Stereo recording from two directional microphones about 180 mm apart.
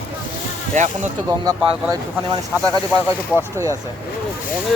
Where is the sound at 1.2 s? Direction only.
20° right (ahead or behind).